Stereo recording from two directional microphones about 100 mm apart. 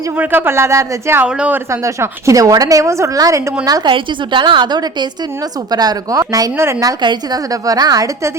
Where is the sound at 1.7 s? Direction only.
30° right (ahead or behind).